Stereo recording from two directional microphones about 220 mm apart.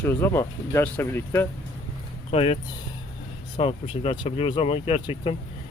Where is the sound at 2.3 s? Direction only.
25° left (ahead or behind).